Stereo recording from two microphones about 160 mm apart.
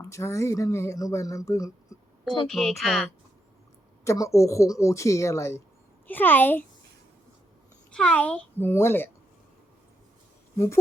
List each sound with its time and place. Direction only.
0.0 s speech: 20° left (ahead or behind)
2.5 s a child's voice: centre (ahead or behind)
4.0 s a child's voice: 20° left (ahead or behind)
7.9 s a child's voice: 5° left (ahead or behind)